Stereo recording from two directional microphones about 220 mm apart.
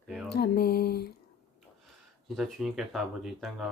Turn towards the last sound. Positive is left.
turn(degrees=0)  # may be behind; listen again after turning